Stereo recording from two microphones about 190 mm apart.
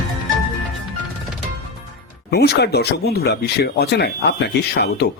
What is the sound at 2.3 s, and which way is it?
Speech, 60° left (ahead or behind).